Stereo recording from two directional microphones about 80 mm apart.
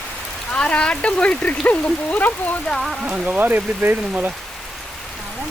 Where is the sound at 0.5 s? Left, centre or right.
Centre.